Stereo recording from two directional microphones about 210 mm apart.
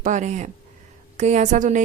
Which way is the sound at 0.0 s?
35° right (ahead or behind).